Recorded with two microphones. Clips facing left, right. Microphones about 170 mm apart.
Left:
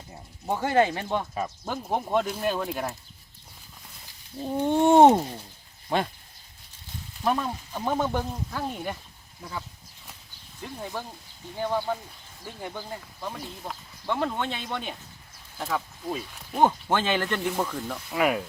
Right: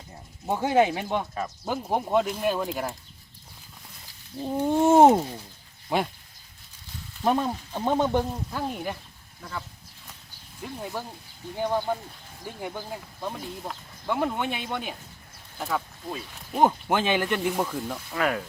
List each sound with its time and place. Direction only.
0.4 s speech: 10° right (ahead or behind)
4.4 s a sound: centre (ahead or behind)
5.9 s speech: 10° right (ahead or behind)
7.3 s speech: 30° right (ahead or behind)
7.8 s speech: 20° right (ahead or behind)
8.6 s a sound: 5° right (ahead or behind)
9.4 s speech: 10° left (ahead or behind)
10.6 s speech: 5° right (ahead or behind)
16.6 s speech: 10° right (ahead or behind)
18.1 s speech: 10° left (ahead or behind)